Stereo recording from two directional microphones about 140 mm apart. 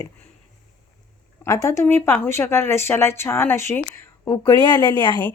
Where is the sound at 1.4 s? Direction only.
20° left (ahead or behind).